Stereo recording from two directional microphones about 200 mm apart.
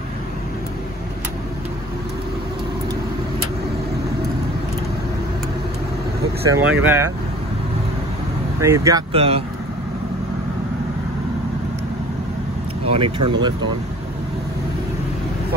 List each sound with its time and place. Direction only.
6.5 s speech: 10° right (ahead or behind)
8.5 s speech: 15° right (ahead or behind)
9.1 s speech: 30° right (ahead or behind)
12.8 s speech: 25° right (ahead or behind)